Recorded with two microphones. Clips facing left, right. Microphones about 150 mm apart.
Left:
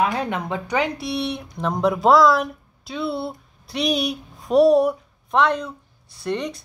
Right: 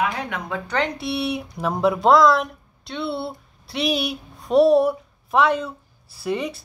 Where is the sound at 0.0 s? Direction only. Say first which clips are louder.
Left 3 dB; 25° left (ahead or behind).